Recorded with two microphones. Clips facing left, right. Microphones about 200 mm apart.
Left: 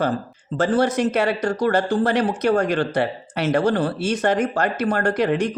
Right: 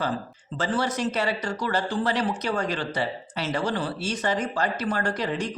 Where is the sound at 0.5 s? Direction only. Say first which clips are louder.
Left 8 dB; 50° left (ahead or behind).